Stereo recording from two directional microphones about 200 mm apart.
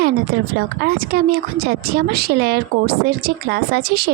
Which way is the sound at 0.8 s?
50° right (ahead or behind).